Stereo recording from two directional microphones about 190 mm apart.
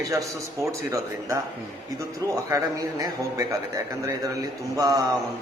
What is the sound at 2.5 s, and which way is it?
Speech, 15° right (ahead or behind).